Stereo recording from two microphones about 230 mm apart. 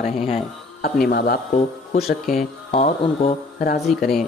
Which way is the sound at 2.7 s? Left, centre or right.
Left.